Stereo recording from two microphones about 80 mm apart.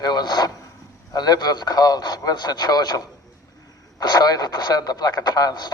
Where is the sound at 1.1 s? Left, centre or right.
Left.